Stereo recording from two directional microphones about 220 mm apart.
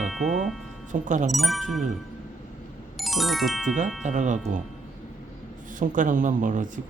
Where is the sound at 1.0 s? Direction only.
35° right (ahead or behind).